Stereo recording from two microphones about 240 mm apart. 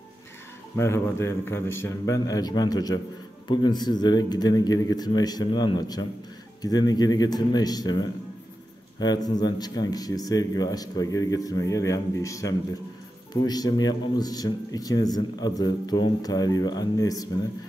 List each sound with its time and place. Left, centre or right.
0.7 s speech: centre